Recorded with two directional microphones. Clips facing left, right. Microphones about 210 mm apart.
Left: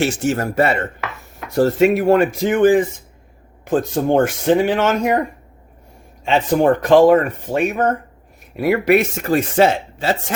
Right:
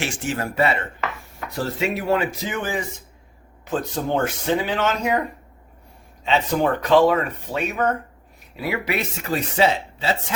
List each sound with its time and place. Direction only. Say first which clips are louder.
0.0 s speech: left 8 dB; 40° left (ahead or behind)
6.2 s speech: left 6 dB; 50° left (ahead or behind)